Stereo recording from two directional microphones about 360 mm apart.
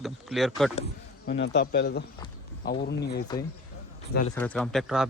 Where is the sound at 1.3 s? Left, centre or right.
Left.